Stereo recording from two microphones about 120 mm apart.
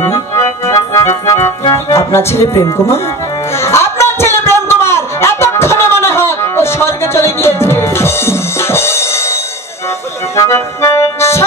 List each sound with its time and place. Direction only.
0.0 s organ: 25° left (ahead or behind)
1.2 s music: 25° left (ahead or behind)
1.6 s music: 40° left (ahead or behind)
2.0 s speech: 20° left (ahead or behind)
3.6 s a sound: 20° left (ahead or behind)
10.3 s accordion: 25° left (ahead or behind)